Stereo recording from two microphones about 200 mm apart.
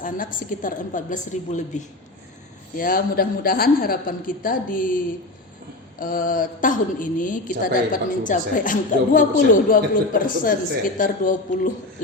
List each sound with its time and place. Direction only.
0.0 s a woman's voice: 45° left (ahead or behind)
6.0 s a woman's voice: 45° left (ahead or behind)